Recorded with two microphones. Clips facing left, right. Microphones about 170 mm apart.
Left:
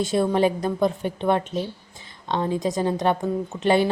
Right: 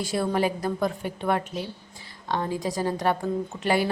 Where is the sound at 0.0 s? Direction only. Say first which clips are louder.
Left 5 dB; 25° left (ahead or behind).